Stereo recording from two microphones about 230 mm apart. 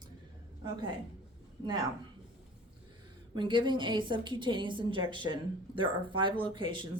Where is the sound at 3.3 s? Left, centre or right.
Right.